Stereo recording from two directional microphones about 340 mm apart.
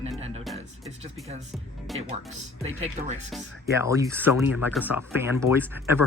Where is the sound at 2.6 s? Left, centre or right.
Centre.